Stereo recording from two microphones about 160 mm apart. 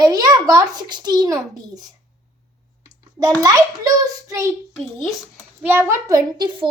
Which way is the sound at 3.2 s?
25° right (ahead or behind).